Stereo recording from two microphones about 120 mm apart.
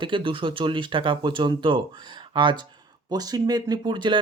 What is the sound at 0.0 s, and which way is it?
Speech, 45° right (ahead or behind).